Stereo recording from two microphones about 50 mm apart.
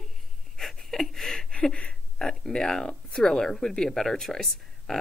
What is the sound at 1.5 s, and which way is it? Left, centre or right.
Speech, left.